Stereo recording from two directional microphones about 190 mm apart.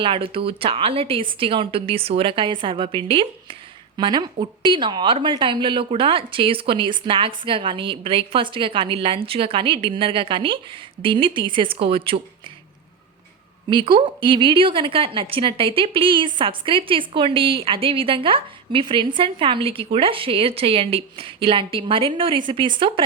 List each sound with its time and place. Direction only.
0.0 s a woman's voice: 30° right (ahead or behind)
13.7 s a woman's voice: 25° right (ahead or behind)